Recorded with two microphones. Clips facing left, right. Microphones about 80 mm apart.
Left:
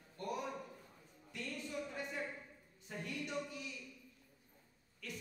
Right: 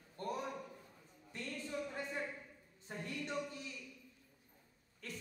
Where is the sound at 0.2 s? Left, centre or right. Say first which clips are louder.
Even; right.